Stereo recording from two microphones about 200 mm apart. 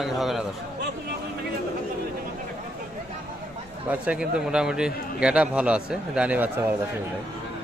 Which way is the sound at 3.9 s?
5° right (ahead or behind).